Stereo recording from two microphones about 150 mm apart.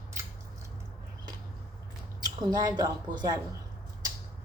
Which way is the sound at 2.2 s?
25° right (ahead or behind).